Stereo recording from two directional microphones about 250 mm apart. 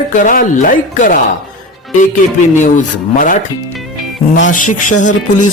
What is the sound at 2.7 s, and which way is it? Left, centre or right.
Speech, left.